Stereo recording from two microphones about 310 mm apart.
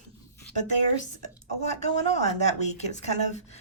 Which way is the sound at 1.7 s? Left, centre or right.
Left.